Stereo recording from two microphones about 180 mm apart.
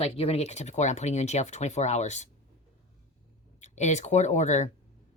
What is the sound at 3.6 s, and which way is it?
Speech, 40° left (ahead or behind).